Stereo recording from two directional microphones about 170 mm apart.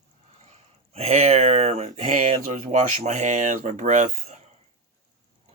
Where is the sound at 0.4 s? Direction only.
40° right (ahead or behind).